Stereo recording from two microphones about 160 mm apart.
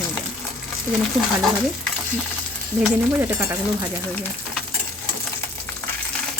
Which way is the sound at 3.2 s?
15° right (ahead or behind).